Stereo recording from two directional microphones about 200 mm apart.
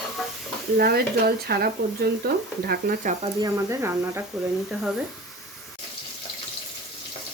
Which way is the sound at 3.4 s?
15° right (ahead or behind).